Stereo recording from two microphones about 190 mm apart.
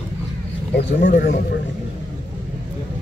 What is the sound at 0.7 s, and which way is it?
Speech, 45° left (ahead or behind).